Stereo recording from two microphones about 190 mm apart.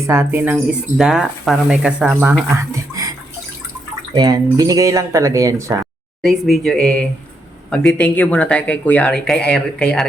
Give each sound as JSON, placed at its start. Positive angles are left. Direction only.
{"t": 0.1, "sound": "speech", "side_deg": -10}
{"t": 2.9, "sound": "bathtub", "side_deg": -20}
{"t": 4.1, "sound": "speech", "side_deg": -20}
{"t": 6.2, "sound": "speech", "side_deg": 0}